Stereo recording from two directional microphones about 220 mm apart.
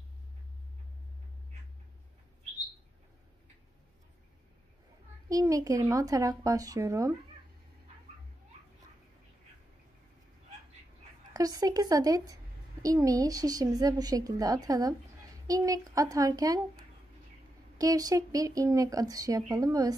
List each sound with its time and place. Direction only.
5.3 s speech: 15° right (ahead or behind)
11.3 s speech: 15° right (ahead or behind)